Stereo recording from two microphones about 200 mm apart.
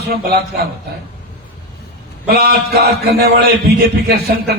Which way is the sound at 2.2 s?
50° right (ahead or behind).